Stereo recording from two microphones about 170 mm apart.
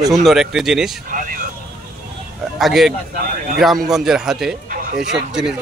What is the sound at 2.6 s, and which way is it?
Speech, centre (ahead or behind).